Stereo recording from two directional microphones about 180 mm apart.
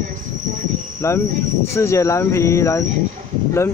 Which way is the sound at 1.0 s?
15° left (ahead or behind).